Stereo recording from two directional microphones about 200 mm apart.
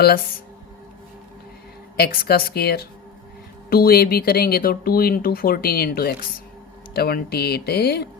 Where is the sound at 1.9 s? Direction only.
50° left (ahead or behind).